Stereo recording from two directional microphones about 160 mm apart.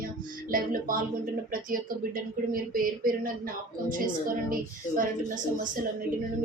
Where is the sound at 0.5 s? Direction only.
60° right (ahead or behind).